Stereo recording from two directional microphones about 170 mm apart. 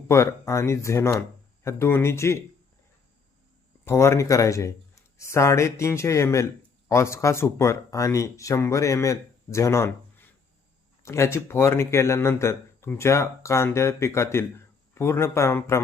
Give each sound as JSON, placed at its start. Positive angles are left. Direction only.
{"t": 0.1, "sound": "speech", "side_deg": 15}
{"t": 3.8, "sound": "speech", "side_deg": 15}